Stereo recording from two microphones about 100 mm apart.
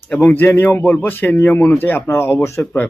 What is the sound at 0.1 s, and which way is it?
Speech, 15° left (ahead or behind).